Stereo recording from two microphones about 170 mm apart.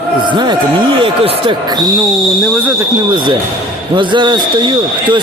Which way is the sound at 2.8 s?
25° right (ahead or behind).